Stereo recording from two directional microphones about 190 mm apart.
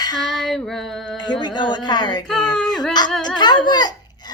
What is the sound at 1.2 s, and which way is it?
Speech, 25° left (ahead or behind).